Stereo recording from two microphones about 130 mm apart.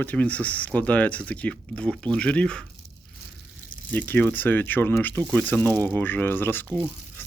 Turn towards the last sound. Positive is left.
turn(degrees=15)  # may be behind; listen again after turning